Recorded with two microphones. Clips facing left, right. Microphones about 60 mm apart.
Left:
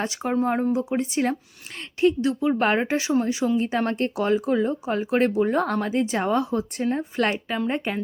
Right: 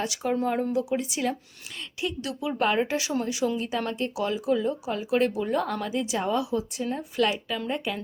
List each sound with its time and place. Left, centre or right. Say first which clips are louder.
0.0 s speech: left 3 dB; left